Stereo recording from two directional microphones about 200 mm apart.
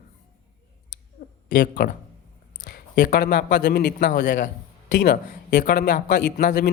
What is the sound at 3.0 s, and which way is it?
Speech, 45° left (ahead or behind).